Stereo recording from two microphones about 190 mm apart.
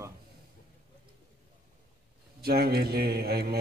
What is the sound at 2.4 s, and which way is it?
A man's voice, 55° right (ahead or behind).